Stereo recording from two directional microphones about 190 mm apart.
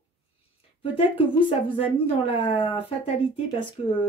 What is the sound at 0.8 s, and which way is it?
Speech, 30° left (ahead or behind).